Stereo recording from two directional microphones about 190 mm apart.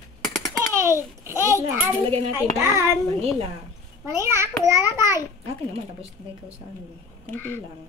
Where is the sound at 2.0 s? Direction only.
35° right (ahead or behind).